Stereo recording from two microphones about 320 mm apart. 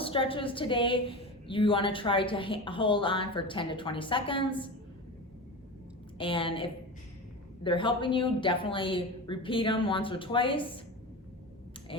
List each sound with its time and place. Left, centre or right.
0.0 s a woman's voice: centre
6.1 s a woman's voice: centre